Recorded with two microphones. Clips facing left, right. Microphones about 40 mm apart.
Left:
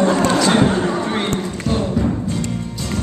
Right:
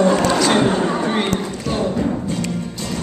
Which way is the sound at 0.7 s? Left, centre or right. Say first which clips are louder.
Even; centre.